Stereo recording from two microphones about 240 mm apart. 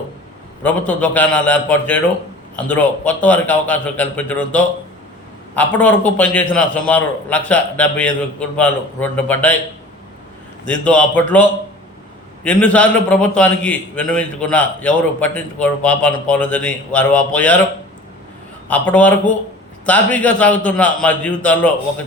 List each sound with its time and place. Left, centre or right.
0.6 s a man's voice: centre
10.7 s a man's voice: centre
18.7 s a man's voice: centre